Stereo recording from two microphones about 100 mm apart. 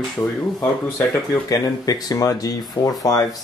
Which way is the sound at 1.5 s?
40° left (ahead or behind).